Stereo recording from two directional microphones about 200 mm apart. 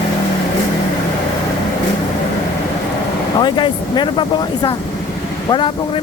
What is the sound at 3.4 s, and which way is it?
Speech, 20° left (ahead or behind).